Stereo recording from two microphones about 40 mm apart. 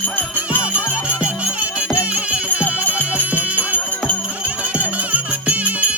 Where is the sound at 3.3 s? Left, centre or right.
Right.